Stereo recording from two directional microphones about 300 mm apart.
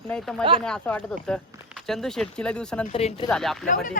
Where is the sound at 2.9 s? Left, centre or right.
Centre.